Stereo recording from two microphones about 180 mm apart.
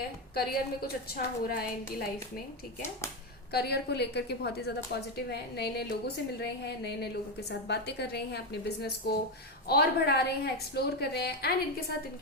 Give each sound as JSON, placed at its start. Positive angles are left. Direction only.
{"t": 0.3, "sound": "a woman's voice", "side_deg": 55}
{"t": 3.5, "sound": "a woman's voice", "side_deg": 65}